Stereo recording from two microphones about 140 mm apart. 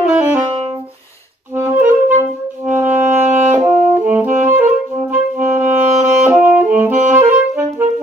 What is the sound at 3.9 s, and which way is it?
Saxophone, 10° right (ahead or behind).